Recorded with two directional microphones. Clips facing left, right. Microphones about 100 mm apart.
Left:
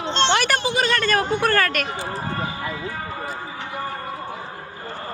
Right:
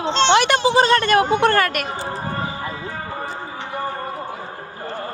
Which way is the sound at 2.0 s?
20° right (ahead or behind).